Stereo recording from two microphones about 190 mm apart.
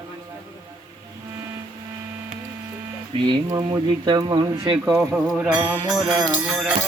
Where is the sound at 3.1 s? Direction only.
20° right (ahead or behind).